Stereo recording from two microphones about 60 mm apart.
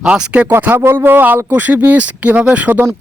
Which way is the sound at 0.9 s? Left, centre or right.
Right.